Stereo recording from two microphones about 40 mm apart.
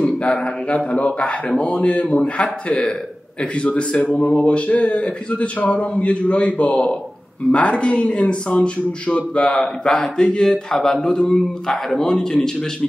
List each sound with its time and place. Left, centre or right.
0.0 s speech: centre
0.7 s speech: left
3.5 s speech: left
9.4 s speech: centre
9.9 s speech: left